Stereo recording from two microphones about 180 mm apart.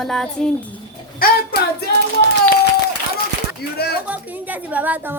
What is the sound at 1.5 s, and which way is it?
Hands, 65° left (ahead or behind).